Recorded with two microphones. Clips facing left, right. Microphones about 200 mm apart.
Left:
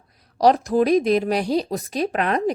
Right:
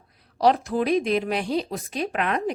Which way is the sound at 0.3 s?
40° left (ahead or behind).